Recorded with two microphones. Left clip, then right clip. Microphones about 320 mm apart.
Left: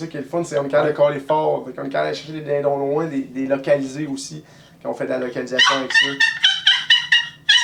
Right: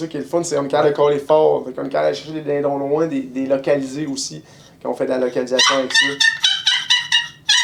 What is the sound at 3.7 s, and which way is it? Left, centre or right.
Speech, left.